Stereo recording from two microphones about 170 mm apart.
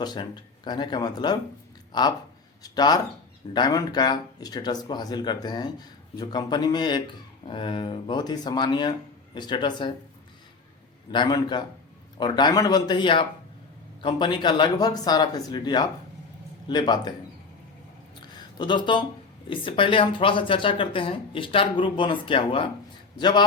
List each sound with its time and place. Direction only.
0.0 s speech: 25° left (ahead or behind)
11.1 s speech: 25° left (ahead or behind)
18.5 s speech: 25° left (ahead or behind)